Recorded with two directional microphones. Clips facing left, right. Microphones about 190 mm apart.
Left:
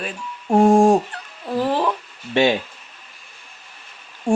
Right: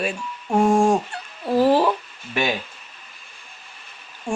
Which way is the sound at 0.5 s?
35° left (ahead or behind).